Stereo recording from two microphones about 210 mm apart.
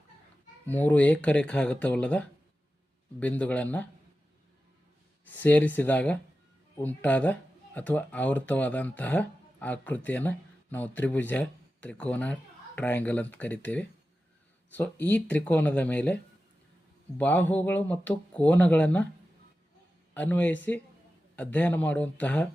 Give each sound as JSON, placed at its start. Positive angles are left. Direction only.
{"t": 0.7, "sound": "speech", "side_deg": 10}
{"t": 5.3, "sound": "speech", "side_deg": 10}
{"t": 17.2, "sound": "speech", "side_deg": 10}
{"t": 20.1, "sound": "speech", "side_deg": 10}